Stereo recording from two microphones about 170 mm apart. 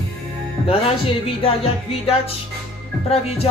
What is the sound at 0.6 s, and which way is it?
Speech, 35° left (ahead or behind).